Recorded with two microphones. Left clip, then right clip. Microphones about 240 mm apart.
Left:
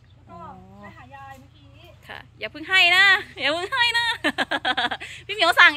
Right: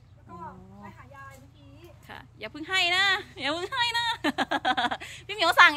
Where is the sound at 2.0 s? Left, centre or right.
Centre.